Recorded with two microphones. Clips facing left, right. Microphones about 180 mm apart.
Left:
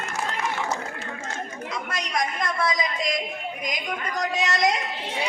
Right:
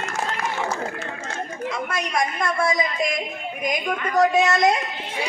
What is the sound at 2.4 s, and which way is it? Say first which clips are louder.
A woman's voice: right 3 dB; 50° right (ahead or behind).